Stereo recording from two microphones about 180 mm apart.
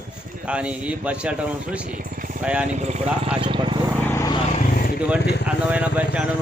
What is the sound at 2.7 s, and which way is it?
Speech, 40° right (ahead or behind).